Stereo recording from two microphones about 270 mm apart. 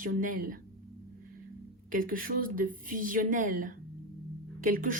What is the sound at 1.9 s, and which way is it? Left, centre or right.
Speech, right.